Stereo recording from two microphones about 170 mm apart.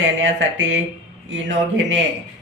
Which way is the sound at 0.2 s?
90° right.